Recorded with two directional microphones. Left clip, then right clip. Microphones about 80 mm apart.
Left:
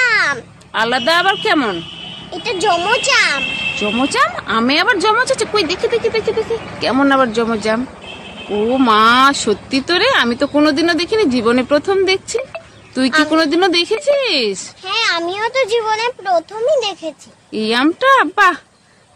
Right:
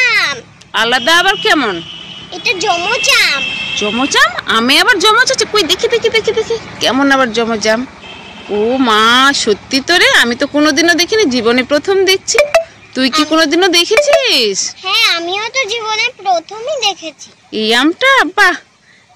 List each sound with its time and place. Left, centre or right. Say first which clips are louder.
0.0 s babbling: right 2 dB; left
0.7 s speech: right 4 dB; centre
2.7 s speech: right 1 dB; left
3.7 s speech: right 6 dB; centre
8.5 s speech: right 2 dB; centre
14.9 s a child's voice: right 4 dB; left
17.5 s speech: right 4 dB; centre